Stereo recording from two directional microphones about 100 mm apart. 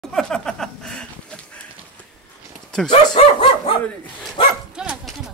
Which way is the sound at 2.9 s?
50° left (ahead or behind).